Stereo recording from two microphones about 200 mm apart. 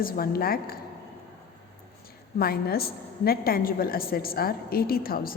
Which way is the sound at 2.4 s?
50° left (ahead or behind).